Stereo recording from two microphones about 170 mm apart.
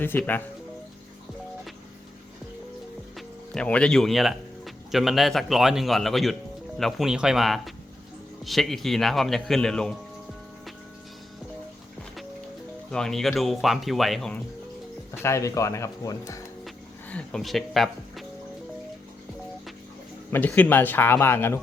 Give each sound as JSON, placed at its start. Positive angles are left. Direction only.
{"t": 0.0, "sound": "speech", "side_deg": 10}
{"t": 3.2, "sound": "a man's voice", "side_deg": 5}
{"t": 12.9, "sound": "a man's voice", "side_deg": 5}
{"t": 15.2, "sound": "speech", "side_deg": 15}
{"t": 16.6, "sound": "speech", "side_deg": 5}
{"t": 20.3, "sound": "speech", "side_deg": 10}